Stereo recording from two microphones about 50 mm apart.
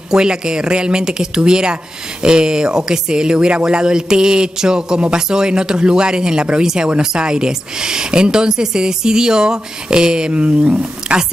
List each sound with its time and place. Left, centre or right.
0.1 s speech: centre